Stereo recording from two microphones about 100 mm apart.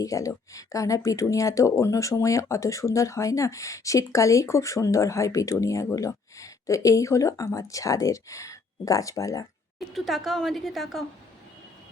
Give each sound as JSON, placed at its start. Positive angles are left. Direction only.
{"t": 0.0, "sound": "speech", "side_deg": 35}
{"t": 9.9, "sound": "a woman's voice", "side_deg": 0}